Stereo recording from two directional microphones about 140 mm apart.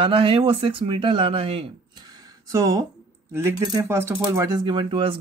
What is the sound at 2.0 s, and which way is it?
Speech, 25° right (ahead or behind).